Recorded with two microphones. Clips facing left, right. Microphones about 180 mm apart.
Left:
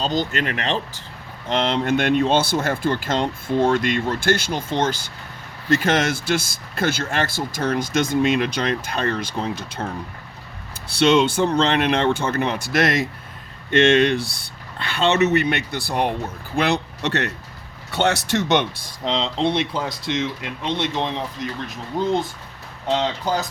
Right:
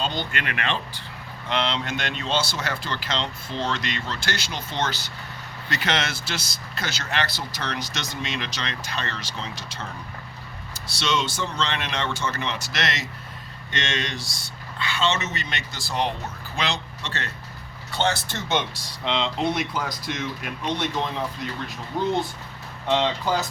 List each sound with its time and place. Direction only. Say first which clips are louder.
0.0 s speech: left 6 dB; 40° left (ahead or behind)
1.5 s speech: left 6 dB; 50° left (ahead or behind)
19.0 s speech: left 3 dB; 35° left (ahead or behind)